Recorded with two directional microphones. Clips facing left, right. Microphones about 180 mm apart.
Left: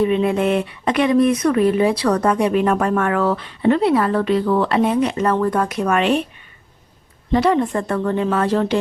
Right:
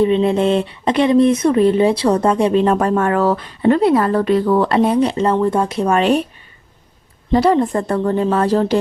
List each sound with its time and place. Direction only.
0.0 s speech: 30° right (ahead or behind)
7.3 s speech: 35° right (ahead or behind)